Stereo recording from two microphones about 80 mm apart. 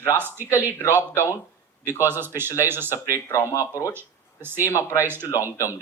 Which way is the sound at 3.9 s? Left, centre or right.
Right.